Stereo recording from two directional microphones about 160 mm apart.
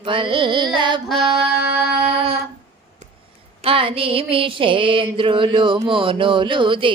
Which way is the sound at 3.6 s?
35° right (ahead or behind).